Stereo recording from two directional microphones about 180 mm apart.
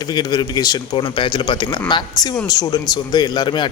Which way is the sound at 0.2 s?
25° left (ahead or behind).